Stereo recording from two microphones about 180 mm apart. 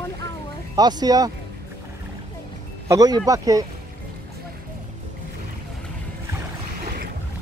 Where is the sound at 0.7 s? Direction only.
20° right (ahead or behind).